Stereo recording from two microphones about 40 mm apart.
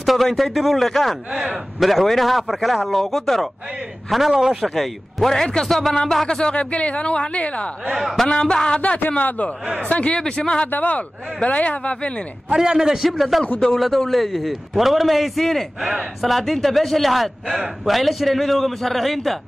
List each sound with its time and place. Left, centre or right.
0.0 s a sound: centre
0.3 s a man's voice: centre
4.4 s a man's voice: centre
4.6 s a man's voice: centre
6.2 s speech: left
6.5 s speech: left
7.8 s a man's voice: centre
8.3 s speech: centre
9.1 s speech: left
10.4 s speech: left
10.7 s speech: left
12.5 s a man's voice: centre